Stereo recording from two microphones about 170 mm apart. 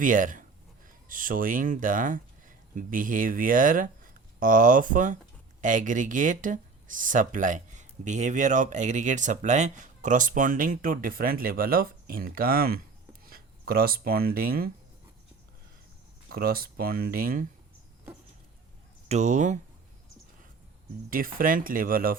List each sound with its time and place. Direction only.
0.0 s speech: 50° right (ahead or behind)
16.3 s speech: 60° right (ahead or behind)
19.0 s speech: 40° right (ahead or behind)
21.1 s speech: 55° right (ahead or behind)